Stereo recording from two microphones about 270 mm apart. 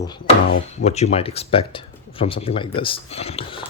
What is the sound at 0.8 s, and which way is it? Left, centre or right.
Speech, left.